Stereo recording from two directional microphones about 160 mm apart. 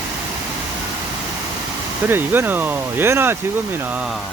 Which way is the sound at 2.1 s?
15° right (ahead or behind).